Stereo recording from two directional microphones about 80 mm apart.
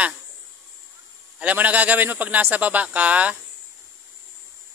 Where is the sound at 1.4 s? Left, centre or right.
Centre.